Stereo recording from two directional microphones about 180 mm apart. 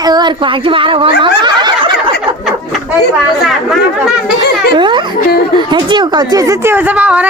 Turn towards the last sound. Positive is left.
turn(degrees=-5)  # may be behind; listen again after turning